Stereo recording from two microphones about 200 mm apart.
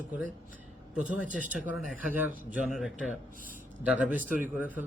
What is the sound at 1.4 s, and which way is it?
Speech, 40° right (ahead or behind).